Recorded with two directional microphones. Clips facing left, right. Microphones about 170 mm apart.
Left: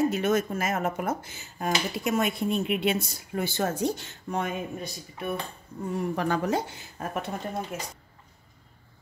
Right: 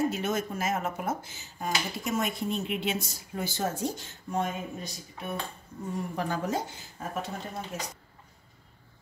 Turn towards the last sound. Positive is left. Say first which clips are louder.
# left 4 dB
turn(degrees=65)  # may be behind; listen again after turning